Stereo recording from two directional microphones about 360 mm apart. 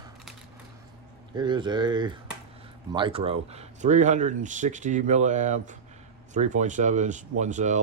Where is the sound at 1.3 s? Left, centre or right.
Centre.